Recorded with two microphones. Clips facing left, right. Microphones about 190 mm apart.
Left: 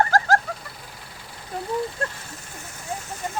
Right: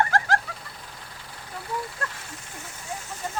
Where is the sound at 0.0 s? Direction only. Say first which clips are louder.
Left 4 dB; 40° left (ahead or behind).